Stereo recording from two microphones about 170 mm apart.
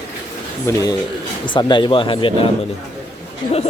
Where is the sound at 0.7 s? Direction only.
15° left (ahead or behind).